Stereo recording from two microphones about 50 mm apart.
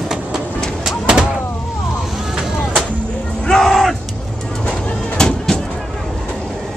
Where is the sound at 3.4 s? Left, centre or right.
Centre.